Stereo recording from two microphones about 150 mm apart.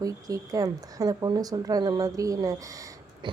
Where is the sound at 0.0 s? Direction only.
25° right (ahead or behind).